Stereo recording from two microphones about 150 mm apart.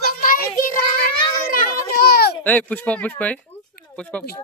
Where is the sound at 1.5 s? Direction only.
80° left.